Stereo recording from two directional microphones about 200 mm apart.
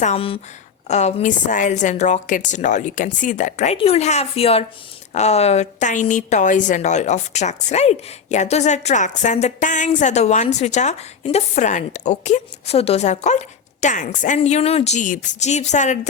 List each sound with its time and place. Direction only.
0.0 s a woman's voice: 30° left (ahead or behind)